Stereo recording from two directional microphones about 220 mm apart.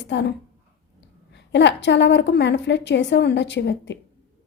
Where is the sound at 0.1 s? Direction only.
55° left (ahead or behind).